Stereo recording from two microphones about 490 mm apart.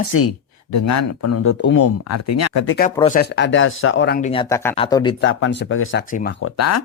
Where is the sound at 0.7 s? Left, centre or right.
Left.